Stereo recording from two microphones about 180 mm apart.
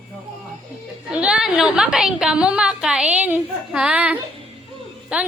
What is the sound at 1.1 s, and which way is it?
A woman's voice, 5° right (ahead or behind).